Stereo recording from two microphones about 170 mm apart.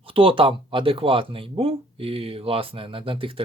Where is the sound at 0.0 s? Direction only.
35° right (ahead or behind).